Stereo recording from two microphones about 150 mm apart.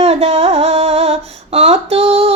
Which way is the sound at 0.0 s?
45° right (ahead or behind).